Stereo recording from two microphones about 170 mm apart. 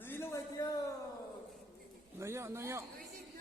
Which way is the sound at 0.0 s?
15° left (ahead or behind).